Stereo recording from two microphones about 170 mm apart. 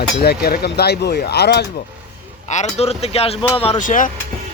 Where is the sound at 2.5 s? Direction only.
40° left (ahead or behind).